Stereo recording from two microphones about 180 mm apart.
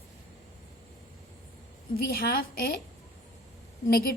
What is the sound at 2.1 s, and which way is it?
Speech, 55° left (ahead or behind).